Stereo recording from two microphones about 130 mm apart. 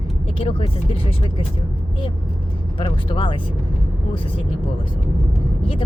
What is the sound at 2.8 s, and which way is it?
Speech, 40° left (ahead or behind).